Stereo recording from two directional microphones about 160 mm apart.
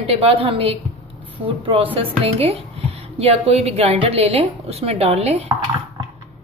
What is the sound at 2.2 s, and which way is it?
A woman's voice, 40° right (ahead or behind).